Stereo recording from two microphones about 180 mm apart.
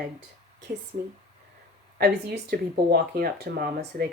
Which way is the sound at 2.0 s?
60° right (ahead or behind).